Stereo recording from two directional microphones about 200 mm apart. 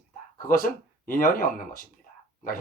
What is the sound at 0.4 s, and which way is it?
Speech, 45° left (ahead or behind).